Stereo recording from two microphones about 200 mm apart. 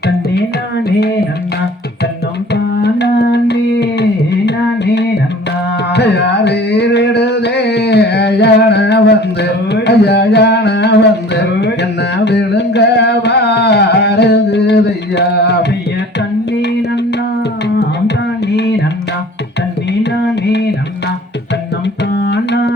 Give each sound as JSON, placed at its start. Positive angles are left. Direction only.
{"t": 0.9, "sound": "music", "side_deg": 55}
{"t": 2.5, "sound": "carnatic music", "side_deg": 55}
{"t": 5.9, "sound": "music", "side_deg": 60}
{"t": 11.3, "sound": "carnatic music", "side_deg": 60}
{"t": 20.5, "sound": "music", "side_deg": 60}
{"t": 22.1, "sound": "music", "side_deg": 55}